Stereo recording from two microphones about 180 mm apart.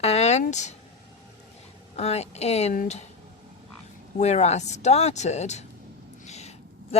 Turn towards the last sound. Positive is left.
turn(degrees=35)  # may be behind; listen again after turning